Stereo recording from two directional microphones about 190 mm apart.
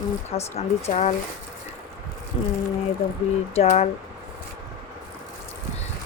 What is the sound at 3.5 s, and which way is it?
Speech, 35° left (ahead or behind).